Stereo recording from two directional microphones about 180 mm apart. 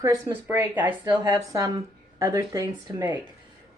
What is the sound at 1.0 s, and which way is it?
A woman's voice, 25° right (ahead or behind).